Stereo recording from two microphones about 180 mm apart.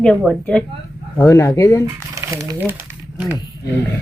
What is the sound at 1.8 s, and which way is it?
Crumpling, 20° right (ahead or behind).